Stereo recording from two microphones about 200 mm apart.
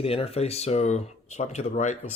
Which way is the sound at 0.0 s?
30° left (ahead or behind).